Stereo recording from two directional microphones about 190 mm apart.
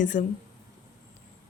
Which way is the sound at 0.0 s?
40° left (ahead or behind).